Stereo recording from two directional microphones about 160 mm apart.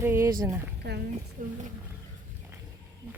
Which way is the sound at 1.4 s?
60° right (ahead or behind).